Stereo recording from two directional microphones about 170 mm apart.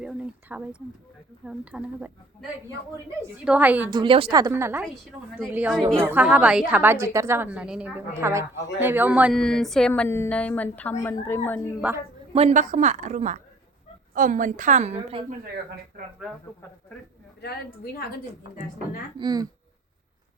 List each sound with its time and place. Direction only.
0.0 s a woman's voice: 5° right (ahead or behind)
3.9 s a woman's voice: 30° right (ahead or behind); by 9.3 s 10° right (ahead or behind)
9.3 s a woman's voice: centre (ahead or behind)
11.8 s a woman's voice: 5° right (ahead or behind)
12.3 s a woman's voice: 35° right (ahead or behind)
17.4 s a woman's voice: 65° left (ahead or behind)
19.2 s speech: 25° right (ahead or behind)